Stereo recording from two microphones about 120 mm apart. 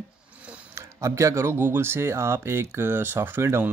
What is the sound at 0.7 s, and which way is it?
Speech, 25° right (ahead or behind).